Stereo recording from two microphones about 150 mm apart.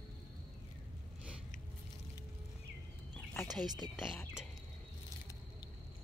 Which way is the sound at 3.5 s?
30° right (ahead or behind).